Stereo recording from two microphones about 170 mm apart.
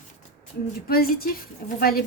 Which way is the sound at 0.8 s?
60° left (ahead or behind).